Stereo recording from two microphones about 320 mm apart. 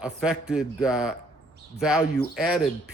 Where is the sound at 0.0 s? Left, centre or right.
Centre.